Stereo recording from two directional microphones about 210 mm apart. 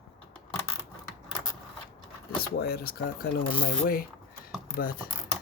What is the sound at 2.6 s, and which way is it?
Speech, 45° left (ahead or behind).